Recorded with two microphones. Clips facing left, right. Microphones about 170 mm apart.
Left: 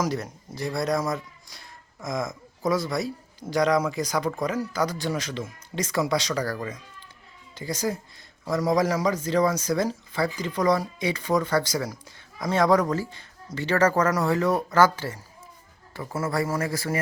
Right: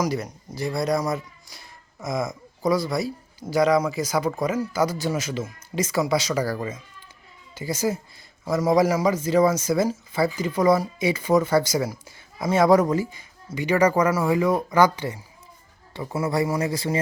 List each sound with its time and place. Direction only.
0.0 s a man's voice: centre (ahead or behind); by 17.0 s 20° right (ahead or behind)